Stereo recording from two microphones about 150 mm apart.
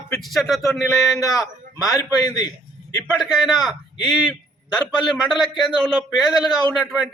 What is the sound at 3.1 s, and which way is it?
A man's voice, centre (ahead or behind).